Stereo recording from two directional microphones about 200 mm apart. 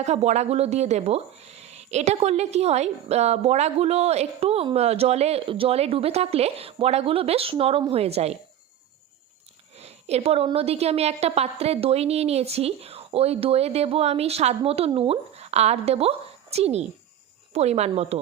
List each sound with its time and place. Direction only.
0.0 s speech: 35° right (ahead or behind)
9.7 s speech: 30° right (ahead or behind)